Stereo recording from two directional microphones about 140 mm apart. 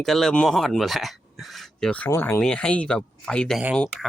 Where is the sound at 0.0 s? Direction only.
Centre (ahead or behind).